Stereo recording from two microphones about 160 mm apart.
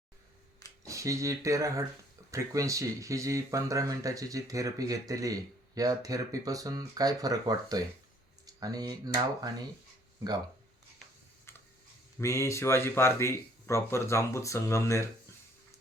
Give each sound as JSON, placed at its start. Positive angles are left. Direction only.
{"t": 0.9, "sound": "speech", "side_deg": -20}
{"t": 12.2, "sound": "speech", "side_deg": 20}